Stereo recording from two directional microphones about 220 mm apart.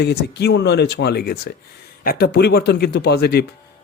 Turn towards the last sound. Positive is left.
turn(degrees=45)  # may be behind; listen again after turning